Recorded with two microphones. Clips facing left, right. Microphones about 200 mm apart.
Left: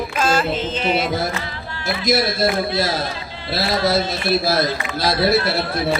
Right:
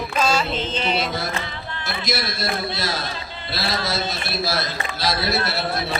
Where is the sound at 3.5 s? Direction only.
55° left (ahead or behind).